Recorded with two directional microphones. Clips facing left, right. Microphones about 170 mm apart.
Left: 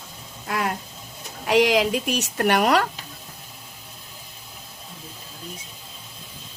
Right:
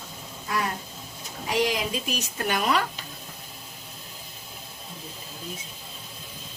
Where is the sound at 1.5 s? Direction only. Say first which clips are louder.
Left 7 dB; 75° left (ahead or behind).